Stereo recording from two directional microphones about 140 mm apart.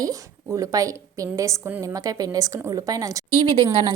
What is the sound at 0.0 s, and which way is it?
A woman's voice, 25° right (ahead or behind).